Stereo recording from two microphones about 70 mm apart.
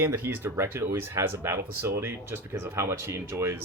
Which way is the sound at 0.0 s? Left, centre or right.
Right.